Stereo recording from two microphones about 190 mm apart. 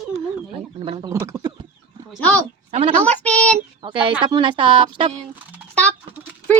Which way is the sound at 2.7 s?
35° right (ahead or behind).